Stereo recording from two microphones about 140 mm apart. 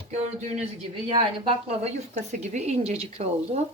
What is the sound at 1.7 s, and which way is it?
Speech, 50° right (ahead or behind).